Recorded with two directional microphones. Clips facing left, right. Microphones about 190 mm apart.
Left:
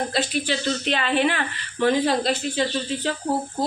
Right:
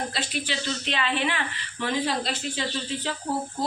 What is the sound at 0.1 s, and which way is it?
Speech, 45° left (ahead or behind).